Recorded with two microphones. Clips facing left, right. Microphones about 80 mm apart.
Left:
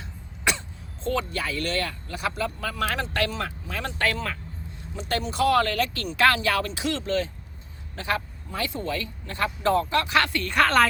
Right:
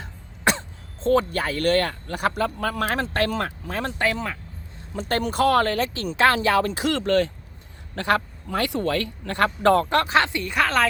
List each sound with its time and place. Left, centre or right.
0.0 s cough: right
1.0 s speech: right
3.9 s speech: centre
4.9 s speech: right
6.7 s speech: right
10.1 s speech: right
10.4 s speech: centre